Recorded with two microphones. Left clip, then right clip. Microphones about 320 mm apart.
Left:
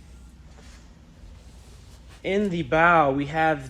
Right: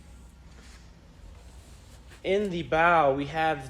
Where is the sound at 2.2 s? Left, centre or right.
Centre.